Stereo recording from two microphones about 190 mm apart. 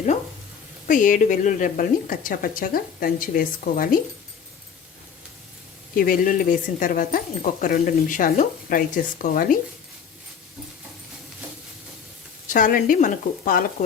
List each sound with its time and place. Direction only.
0.9 s a woman's voice: 45° left (ahead or behind)
6.0 s a woman's voice: 45° left (ahead or behind)
12.5 s a woman's voice: 45° left (ahead or behind)